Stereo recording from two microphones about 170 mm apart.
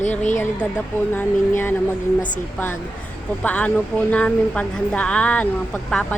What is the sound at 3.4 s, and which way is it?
Speech, 10° left (ahead or behind).